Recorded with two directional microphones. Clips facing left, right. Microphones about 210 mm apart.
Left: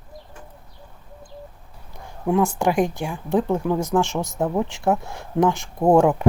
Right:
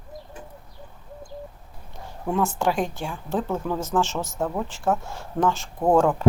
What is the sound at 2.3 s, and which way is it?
Speech, 15° left (ahead or behind).